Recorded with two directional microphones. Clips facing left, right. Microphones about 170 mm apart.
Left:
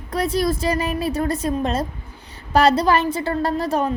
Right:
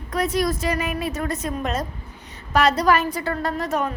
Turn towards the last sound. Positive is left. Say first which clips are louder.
# left 3 dB
turn(degrees=30)  # may be behind; listen again after turning